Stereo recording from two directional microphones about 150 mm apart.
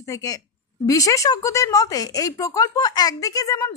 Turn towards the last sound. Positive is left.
turn(degrees=20)  # may be behind; listen again after turning